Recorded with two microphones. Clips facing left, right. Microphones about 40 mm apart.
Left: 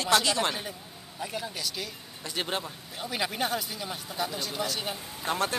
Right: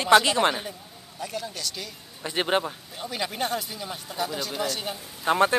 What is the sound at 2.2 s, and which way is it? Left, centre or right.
Speech, right.